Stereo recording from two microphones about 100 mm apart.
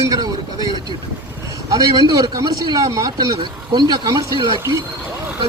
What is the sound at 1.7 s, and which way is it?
Speech, 40° right (ahead or behind).